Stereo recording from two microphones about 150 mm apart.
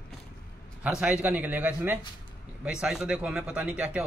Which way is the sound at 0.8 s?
5° right (ahead or behind).